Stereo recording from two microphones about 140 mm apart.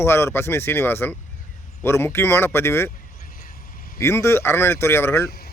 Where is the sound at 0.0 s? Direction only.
20° left (ahead or behind).